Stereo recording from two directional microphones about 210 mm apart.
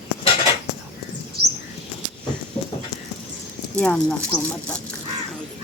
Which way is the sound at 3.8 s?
5° left (ahead or behind).